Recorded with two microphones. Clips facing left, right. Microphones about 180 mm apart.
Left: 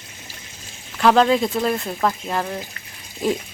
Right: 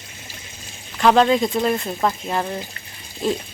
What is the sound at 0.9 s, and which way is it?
Speech, centre (ahead or behind).